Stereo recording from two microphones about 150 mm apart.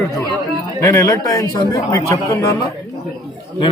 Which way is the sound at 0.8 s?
20° left (ahead or behind).